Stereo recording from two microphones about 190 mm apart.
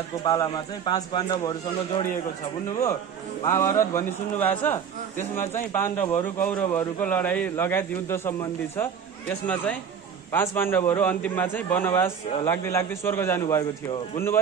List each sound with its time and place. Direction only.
0.2 s a man's voice: 20° left (ahead or behind)
3.5 s a man's voice: 15° left (ahead or behind)